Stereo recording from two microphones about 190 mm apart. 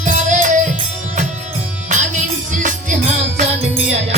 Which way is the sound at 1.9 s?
40° right (ahead or behind).